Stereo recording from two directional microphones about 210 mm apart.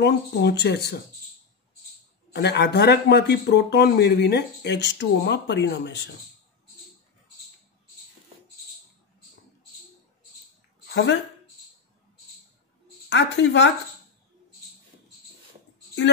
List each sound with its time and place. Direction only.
0.0 s speech: 50° left (ahead or behind)
2.3 s speech: 55° left (ahead or behind)
10.9 s a woman's voice: 50° left (ahead or behind)
13.1 s a woman's voice: 55° left (ahead or behind)